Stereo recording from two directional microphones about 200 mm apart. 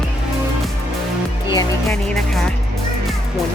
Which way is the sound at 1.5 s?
20° left (ahead or behind).